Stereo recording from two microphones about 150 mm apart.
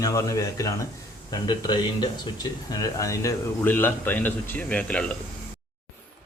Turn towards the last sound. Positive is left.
turn(degrees=10)  # may be behind; listen again after turning